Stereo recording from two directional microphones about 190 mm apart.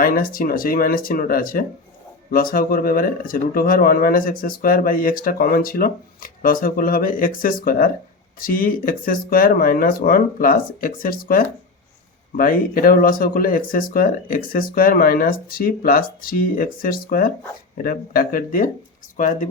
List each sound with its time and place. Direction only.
0.0 s speech: 50° left (ahead or behind)